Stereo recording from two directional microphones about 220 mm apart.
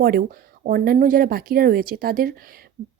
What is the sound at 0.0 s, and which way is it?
Speech, 40° right (ahead or behind).